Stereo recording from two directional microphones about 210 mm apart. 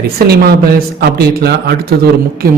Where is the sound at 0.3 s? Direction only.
45° right (ahead or behind).